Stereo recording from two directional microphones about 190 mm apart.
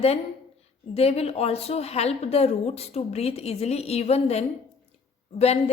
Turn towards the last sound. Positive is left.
turn(degrees=35)  # may be behind; listen again after turning